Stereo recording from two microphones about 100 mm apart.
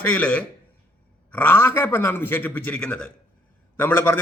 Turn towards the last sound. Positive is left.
turn(degrees=20)  # may be behind; listen again after turning